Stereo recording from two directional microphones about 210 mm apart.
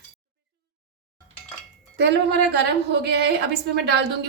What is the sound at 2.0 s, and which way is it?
A woman's voice, 55° right (ahead or behind).